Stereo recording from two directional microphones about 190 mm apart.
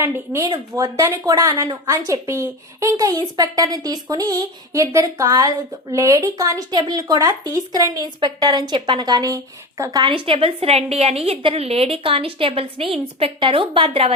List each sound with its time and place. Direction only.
0.0 s a woman's voice: 20° right (ahead or behind)